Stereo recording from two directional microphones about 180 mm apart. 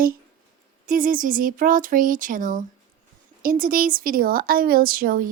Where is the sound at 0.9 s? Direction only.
50° right (ahead or behind).